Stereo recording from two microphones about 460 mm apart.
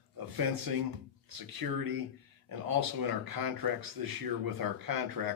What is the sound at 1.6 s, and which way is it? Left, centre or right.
Speech, right.